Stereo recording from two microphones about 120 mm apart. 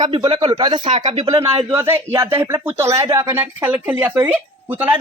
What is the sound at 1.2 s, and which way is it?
A man's voice, 30° right (ahead or behind).